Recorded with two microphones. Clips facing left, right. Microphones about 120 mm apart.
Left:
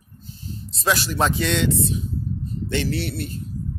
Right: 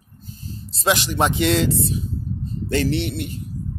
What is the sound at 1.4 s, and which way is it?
Speech, 35° right (ahead or behind).